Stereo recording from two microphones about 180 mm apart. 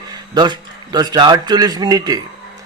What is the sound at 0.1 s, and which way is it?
A man's voice, 25° right (ahead or behind).